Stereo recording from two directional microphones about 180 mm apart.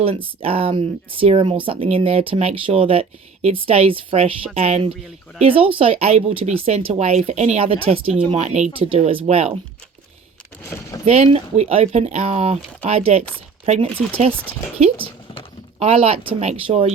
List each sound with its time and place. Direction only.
0.0 s speech: 30° right (ahead or behind)
10.6 s speech: 15° left (ahead or behind)
11.0 s speech: 35° right (ahead or behind)